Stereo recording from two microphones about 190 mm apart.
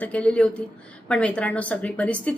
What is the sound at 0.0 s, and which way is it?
Speech, 5° left (ahead or behind).